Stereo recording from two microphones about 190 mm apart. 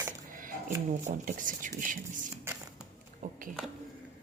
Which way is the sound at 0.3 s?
45° right (ahead or behind).